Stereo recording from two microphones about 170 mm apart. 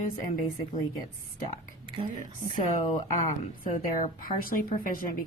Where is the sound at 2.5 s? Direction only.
50° left (ahead or behind).